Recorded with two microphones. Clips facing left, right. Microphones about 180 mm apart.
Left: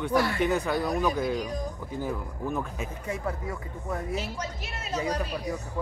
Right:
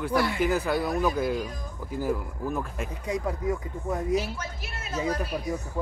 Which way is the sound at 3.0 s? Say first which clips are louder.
Right 5 dB; 15° right (ahead or behind).